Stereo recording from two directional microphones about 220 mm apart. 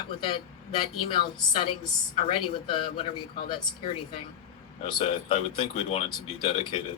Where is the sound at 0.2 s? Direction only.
20° left (ahead or behind).